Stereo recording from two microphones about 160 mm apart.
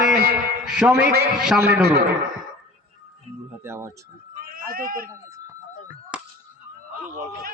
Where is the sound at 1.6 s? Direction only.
90° right.